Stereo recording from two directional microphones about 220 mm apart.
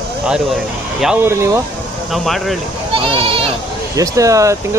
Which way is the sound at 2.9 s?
25° right (ahead or behind).